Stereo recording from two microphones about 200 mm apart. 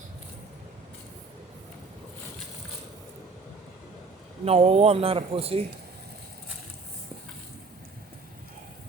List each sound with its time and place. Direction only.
4.4 s speech: 30° right (ahead or behind)